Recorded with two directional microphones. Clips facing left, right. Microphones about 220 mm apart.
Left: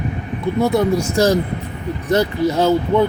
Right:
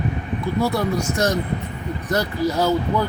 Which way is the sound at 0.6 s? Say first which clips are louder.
Left 6 dB; 20° left (ahead or behind).